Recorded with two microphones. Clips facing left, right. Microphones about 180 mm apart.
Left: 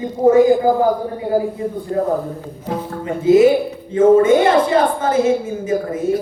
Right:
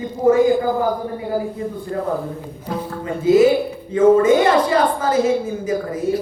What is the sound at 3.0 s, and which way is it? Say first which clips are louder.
Speech: left 2 dB; 25° left (ahead or behind).